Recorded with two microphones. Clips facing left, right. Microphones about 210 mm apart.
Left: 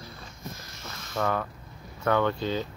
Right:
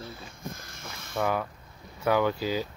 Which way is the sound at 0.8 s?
10° right (ahead or behind).